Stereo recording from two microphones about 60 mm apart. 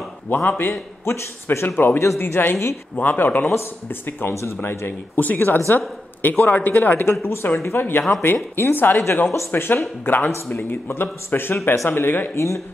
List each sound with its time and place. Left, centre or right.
0.3 s a woman's voice: left
1.0 s a man's voice: left
1.7 s a woman's voice: left
2.0 s a man's voice: left
2.2 s a woman's voice: left
4.3 s a man's voice: left
4.6 s a woman's voice: left
7.4 s a woman's voice: left
11.9 s a woman's voice: left
12.4 s speech: left